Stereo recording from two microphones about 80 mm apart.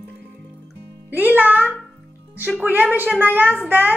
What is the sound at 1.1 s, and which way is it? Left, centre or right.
Speech, right.